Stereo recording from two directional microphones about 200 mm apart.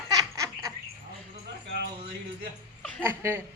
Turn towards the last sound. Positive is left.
turn(degrees=-10)  # may be behind; listen again after turning